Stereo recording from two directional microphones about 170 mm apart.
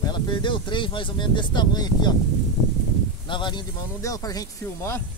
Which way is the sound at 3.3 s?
25° left (ahead or behind).